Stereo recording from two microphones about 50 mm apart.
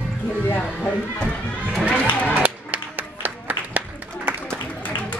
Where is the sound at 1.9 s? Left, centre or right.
Left.